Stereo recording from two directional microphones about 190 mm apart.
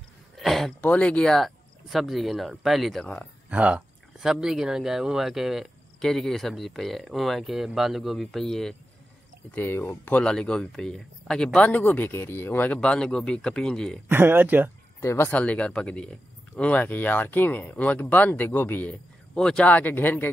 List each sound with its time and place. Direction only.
0.4 s speech: centre (ahead or behind)
3.4 s speech: 5° right (ahead or behind)
14.0 s speech: 10° right (ahead or behind)
15.0 s speech: 15° left (ahead or behind)